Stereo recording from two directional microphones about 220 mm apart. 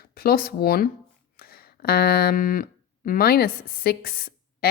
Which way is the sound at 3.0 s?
40° left (ahead or behind).